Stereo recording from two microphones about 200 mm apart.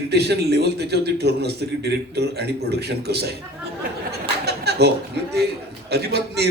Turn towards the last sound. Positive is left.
turn(degrees=-55)  # may be behind; listen again after turning